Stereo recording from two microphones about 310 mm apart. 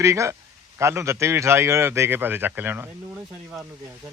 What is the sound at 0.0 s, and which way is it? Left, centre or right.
A man's voice, centre.